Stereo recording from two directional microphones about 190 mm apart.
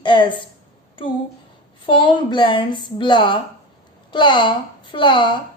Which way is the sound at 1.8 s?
25° left (ahead or behind).